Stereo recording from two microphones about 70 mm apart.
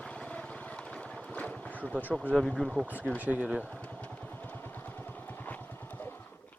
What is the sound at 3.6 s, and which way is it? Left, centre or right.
Vehicle, centre.